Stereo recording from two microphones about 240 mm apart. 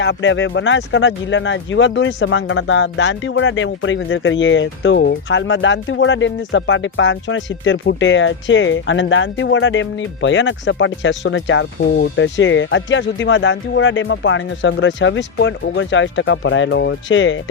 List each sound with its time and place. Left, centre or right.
0.0 s speech: left